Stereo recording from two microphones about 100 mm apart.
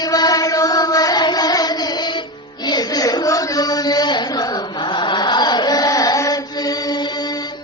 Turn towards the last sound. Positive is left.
turn(degrees=45)  # may be behind; listen again after turning